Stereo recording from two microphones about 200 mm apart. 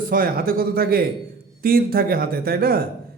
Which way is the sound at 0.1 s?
45° right (ahead or behind).